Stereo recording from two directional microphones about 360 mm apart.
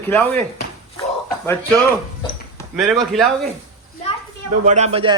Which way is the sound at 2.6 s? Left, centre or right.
Centre.